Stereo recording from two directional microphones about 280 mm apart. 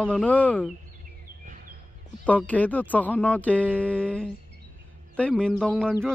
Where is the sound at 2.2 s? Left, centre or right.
Centre.